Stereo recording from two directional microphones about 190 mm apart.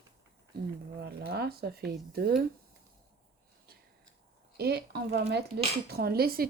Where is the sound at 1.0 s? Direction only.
55° right (ahead or behind).